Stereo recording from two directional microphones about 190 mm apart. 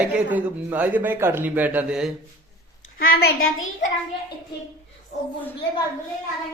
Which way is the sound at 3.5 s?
90° left.